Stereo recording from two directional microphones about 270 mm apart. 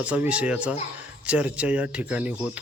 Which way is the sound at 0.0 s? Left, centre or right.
Centre.